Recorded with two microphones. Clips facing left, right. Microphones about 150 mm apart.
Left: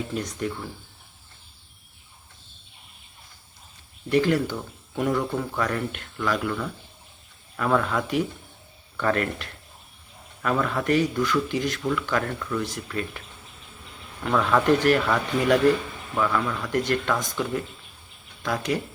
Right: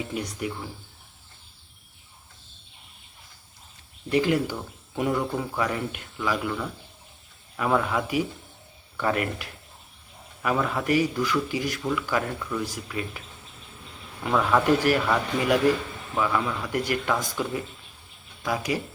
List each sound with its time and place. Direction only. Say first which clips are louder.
0.1 s speech: left 2 dB; 10° right (ahead or behind)
4.1 s speech: left 1 dB; 15° right (ahead or behind)
14.3 s speech: left 1 dB; 10° right (ahead or behind)